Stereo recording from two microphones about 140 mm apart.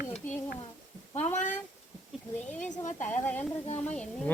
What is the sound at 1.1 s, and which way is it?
Speech, 55° left (ahead or behind).